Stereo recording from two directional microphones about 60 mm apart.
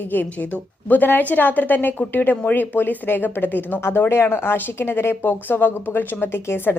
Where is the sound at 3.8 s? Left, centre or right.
Left.